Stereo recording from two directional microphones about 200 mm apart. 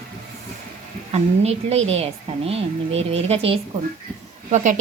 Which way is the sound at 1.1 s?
30° right (ahead or behind).